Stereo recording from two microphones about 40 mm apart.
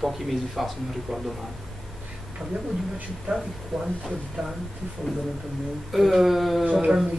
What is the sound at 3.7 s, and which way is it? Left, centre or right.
Speech, centre.